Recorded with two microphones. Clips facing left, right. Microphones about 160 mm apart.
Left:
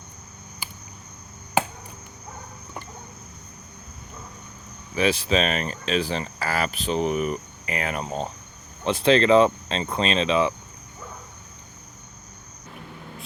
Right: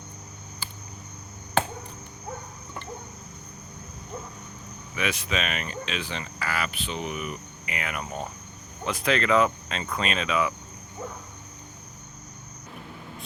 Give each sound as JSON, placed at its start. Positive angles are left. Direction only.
{"t": 0.6, "sound": "cricket", "side_deg": 15}
{"t": 4.9, "sound": "speech", "side_deg": 30}